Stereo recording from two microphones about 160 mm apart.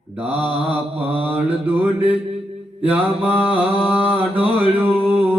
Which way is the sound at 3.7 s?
10° right (ahead or behind).